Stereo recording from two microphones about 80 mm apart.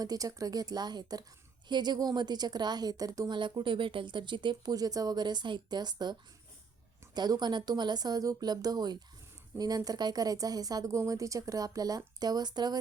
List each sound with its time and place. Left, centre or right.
0.0 s a woman's voice: right
3.3 s speech: right
4.7 s a woman's voice: right